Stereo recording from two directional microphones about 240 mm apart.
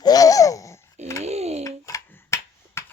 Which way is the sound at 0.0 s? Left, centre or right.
Centre.